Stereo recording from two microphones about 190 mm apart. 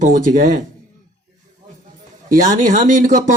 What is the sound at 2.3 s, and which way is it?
Speech, 45° right (ahead or behind).